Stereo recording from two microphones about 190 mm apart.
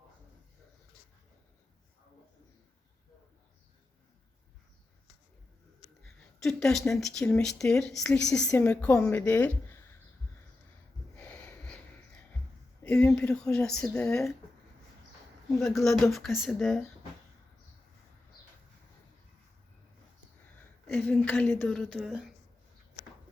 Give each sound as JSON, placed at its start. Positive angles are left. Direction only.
{"t": 6.0, "sound": "speech", "side_deg": 5}
{"t": 11.2, "sound": "snort", "side_deg": 5}
{"t": 12.8, "sound": "speech", "side_deg": 5}
{"t": 15.7, "sound": "speech", "side_deg": 0}
{"t": 20.6, "sound": "a woman's voice", "side_deg": 10}
{"t": 23.0, "sound": "a sound", "side_deg": -20}